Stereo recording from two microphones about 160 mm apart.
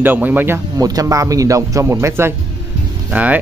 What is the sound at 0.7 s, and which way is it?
Speech, 20° right (ahead or behind).